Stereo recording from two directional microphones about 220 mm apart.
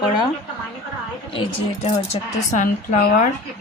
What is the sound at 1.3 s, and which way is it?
Speech, 30° left (ahead or behind).